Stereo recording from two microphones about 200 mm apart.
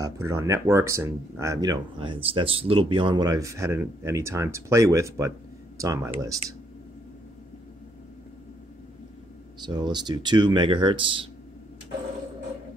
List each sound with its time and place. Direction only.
0.0 s speech: 15° right (ahead or behind)
9.6 s speech: 20° right (ahead or behind)